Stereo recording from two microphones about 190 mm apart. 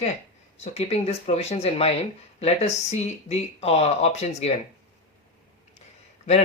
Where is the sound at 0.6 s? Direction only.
30° left (ahead or behind).